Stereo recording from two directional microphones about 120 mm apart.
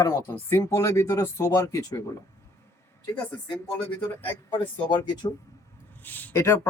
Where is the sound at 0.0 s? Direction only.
25° left (ahead or behind).